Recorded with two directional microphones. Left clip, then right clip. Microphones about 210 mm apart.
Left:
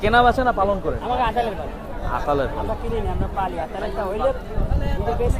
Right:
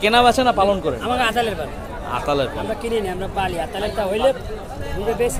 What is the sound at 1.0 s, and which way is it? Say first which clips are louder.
Speech: right 2 dB; 55° right (ahead or behind).